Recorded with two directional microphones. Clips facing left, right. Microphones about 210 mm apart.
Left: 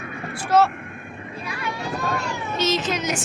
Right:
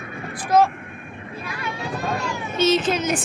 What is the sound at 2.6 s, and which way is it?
Child singing, 55° right (ahead or behind).